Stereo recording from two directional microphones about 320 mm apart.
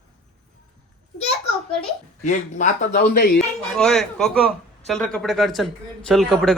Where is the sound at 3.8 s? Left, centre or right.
Centre.